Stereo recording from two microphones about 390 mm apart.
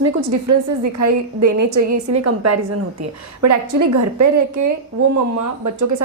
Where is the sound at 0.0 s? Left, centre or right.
Right.